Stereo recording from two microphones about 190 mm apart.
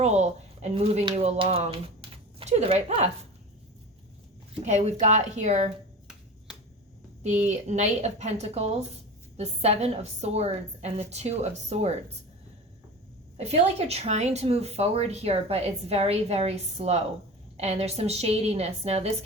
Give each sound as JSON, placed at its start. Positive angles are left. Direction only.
{"t": 0.0, "sound": "speech", "side_deg": -35}
{"t": 4.6, "sound": "a woman's voice", "side_deg": -35}
{"t": 7.4, "sound": "a woman's voice", "side_deg": -35}
{"t": 13.3, "sound": "a woman's voice", "side_deg": -35}